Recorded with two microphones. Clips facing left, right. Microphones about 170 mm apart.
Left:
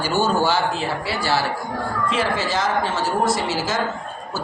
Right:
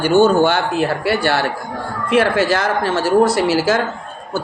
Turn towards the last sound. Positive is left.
turn(degrees=-70)  # may be behind; listen again after turning